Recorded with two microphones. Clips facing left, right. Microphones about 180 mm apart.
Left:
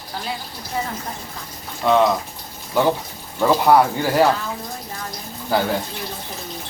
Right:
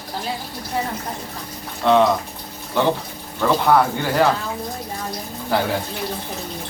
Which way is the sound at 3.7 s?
5° left (ahead or behind).